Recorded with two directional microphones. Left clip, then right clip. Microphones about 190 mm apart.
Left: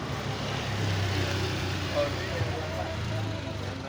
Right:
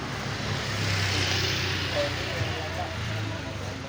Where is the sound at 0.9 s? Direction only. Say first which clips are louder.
Right 7 dB; 30° left (ahead or behind); by 1.9 s 55° left (ahead or behind).